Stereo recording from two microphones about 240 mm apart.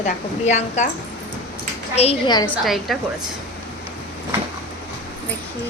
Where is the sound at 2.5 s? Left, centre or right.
Centre.